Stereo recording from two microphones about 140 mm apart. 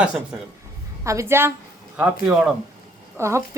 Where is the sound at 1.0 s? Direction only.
20° right (ahead or behind).